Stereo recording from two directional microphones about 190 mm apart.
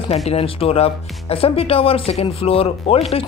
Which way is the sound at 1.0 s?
Centre (ahead or behind).